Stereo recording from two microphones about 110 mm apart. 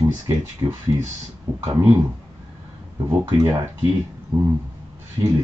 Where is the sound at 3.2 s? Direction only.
25° right (ahead or behind).